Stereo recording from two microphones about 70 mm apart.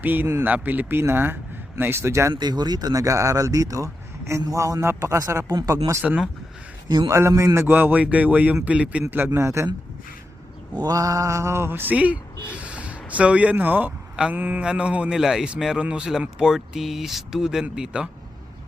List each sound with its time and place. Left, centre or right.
0.0 s a man's voice: right
2.4 s speech: right
4.9 s a man's voice: right
6.0 s speech: centre
6.8 s a man's voice: right
7.1 s a man's voice: right
7.7 s speech: right
9.0 s a man's voice: right
10.9 s speech: right
14.6 s speech: centre